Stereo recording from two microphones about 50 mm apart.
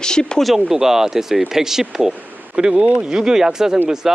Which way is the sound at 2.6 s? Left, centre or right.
Centre.